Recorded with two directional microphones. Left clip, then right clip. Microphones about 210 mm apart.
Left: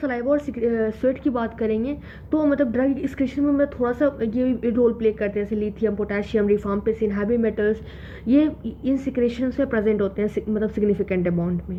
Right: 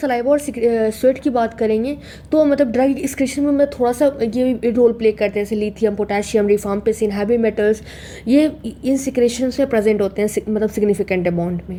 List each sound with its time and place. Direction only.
0.0 s a woman's voice: 20° right (ahead or behind)